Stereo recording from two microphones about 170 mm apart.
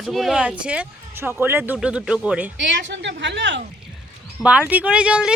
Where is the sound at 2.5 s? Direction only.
90° right.